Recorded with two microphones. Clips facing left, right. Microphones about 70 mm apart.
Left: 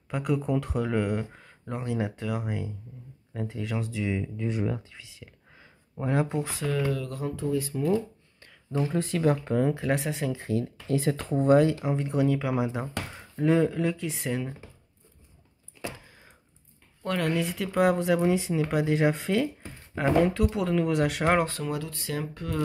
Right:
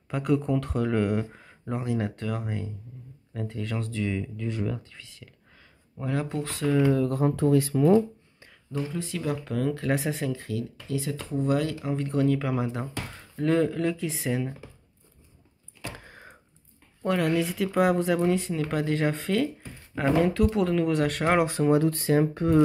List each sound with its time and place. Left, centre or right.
0.1 s speech: centre
6.9 s speech: right
7.3 s speech: right
8.8 s speech: left
9.5 s speech: left
9.8 s speech: centre
10.5 s speech: left
11.5 s speech: left; by 14.7 s centre
16.0 s a sound: right
17.0 s speech: centre
21.5 s speech: right